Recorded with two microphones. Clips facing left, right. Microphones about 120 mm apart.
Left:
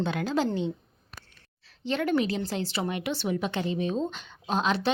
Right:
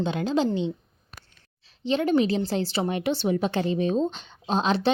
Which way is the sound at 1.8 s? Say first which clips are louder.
Right 4 dB; 20° right (ahead or behind).